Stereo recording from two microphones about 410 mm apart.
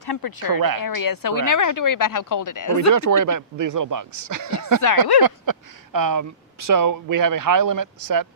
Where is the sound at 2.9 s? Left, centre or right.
Right.